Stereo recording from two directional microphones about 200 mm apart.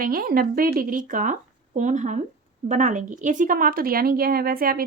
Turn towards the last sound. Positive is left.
turn(degrees=-50)  # may be behind; listen again after turning